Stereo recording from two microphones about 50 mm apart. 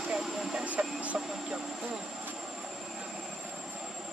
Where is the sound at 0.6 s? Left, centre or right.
Right.